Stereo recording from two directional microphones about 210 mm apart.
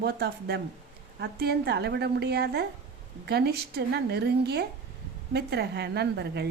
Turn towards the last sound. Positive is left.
turn(degrees=-50)  # may be behind; listen again after turning